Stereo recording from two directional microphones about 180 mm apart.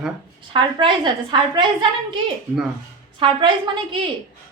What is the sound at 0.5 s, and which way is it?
A woman's voice, 25° right (ahead or behind).